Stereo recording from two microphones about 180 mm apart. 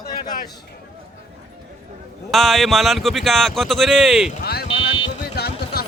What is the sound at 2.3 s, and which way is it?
Speech, centre (ahead or behind).